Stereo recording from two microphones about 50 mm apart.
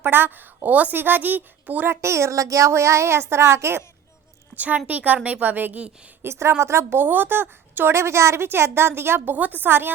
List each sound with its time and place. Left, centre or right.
0.0 s a woman's voice: right
1.9 s speech: right
4.5 s a woman's voice: right
6.2 s a woman's voice: right
7.0 s a woman's voice: right
7.9 s a woman's voice: right
9.3 s a woman's voice: right